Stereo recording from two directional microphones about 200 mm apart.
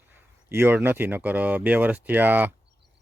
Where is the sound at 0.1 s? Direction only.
10° right (ahead or behind).